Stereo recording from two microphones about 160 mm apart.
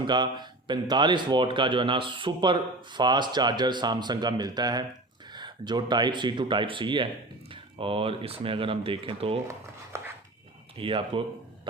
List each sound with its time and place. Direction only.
0.1 s speech: 30° right (ahead or behind)
9.9 s dog: 15° right (ahead or behind)
10.8 s speech: 35° right (ahead or behind)